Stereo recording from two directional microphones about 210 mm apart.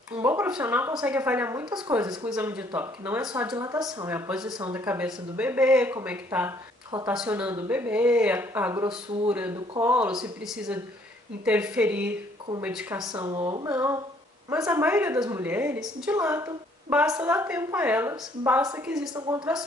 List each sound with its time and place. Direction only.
0.2 s speech: 10° right (ahead or behind)
2.2 s a woman's voice: 5° right (ahead or behind)
13.1 s speech: 20° right (ahead or behind)
19.1 s speech: 20° right (ahead or behind)